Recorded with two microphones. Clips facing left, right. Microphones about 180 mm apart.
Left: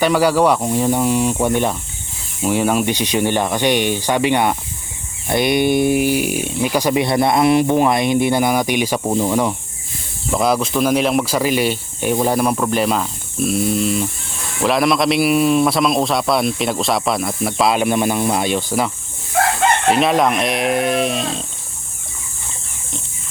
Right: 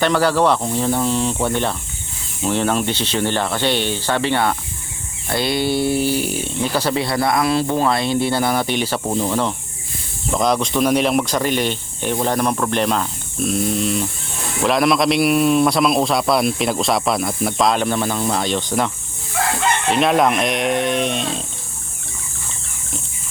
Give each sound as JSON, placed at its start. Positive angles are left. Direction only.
{"t": 0.0, "sound": "a man's voice", "side_deg": 10}
{"t": 20.0, "sound": "a man's voice", "side_deg": 0}